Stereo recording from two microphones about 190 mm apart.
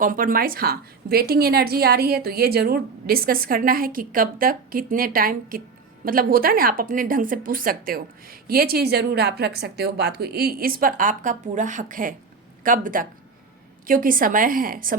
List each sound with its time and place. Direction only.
0.0 s a woman's voice: 45° right (ahead or behind)